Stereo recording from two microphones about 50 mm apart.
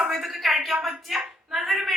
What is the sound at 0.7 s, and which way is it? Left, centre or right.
Speech, right.